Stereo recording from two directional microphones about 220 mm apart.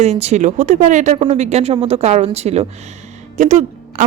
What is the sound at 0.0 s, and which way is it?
A woman's voice, 30° right (ahead or behind).